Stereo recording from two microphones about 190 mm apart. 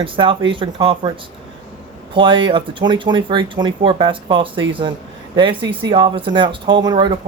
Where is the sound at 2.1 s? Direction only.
25° right (ahead or behind).